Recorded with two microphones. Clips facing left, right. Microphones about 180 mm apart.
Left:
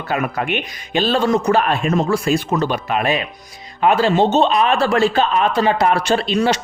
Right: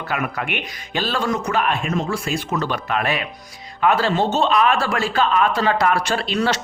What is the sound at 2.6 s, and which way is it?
Speech, 15° left (ahead or behind).